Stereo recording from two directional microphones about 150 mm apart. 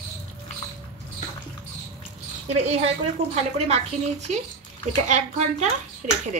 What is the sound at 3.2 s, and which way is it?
Speech, 45° right (ahead or behind).